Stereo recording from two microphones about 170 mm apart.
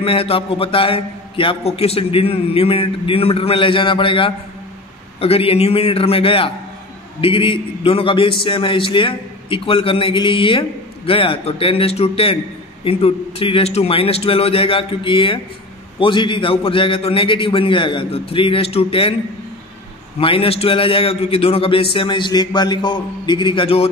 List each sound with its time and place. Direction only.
0.0 s a man's voice: 35° left (ahead or behind)
20.2 s a man's voice: 30° left (ahead or behind)